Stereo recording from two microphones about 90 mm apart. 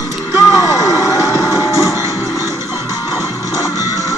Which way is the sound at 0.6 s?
40° left (ahead or behind).